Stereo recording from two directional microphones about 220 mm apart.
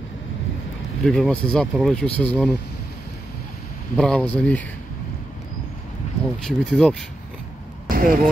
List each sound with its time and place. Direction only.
1.0 s speech: 5° left (ahead or behind)
3.9 s speech: 5° left (ahead or behind)
6.4 s speech: 5° left (ahead or behind)
7.9 s vehicle: 40° right (ahead or behind)